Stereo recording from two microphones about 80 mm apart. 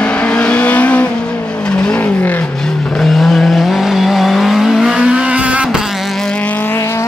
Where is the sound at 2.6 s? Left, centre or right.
Centre.